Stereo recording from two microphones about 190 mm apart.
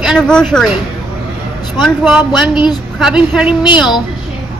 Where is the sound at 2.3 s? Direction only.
25° left (ahead or behind).